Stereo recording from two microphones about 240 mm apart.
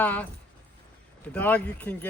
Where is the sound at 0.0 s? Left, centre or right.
Centre.